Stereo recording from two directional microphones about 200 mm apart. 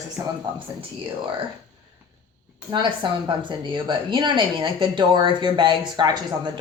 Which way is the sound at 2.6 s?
25° right (ahead or behind).